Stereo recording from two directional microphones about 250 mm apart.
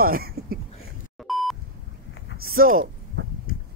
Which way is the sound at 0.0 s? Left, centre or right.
Right.